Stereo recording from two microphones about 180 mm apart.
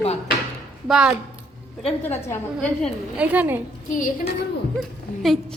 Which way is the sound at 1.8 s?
10° left (ahead or behind).